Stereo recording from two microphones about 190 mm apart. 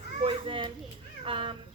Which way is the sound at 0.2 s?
30° right (ahead or behind).